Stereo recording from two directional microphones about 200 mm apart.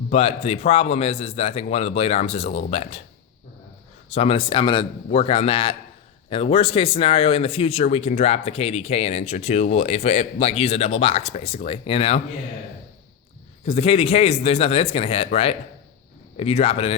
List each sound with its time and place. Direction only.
0.1 s speech: 30° left (ahead or behind)
4.1 s speech: 30° left (ahead or behind)
13.7 s speech: 30° left (ahead or behind)